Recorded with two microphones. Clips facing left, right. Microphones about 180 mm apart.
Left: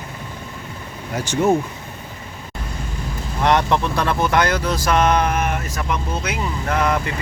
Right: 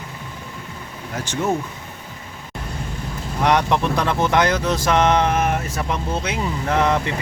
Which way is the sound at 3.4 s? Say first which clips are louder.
Even; 15° right (ahead or behind).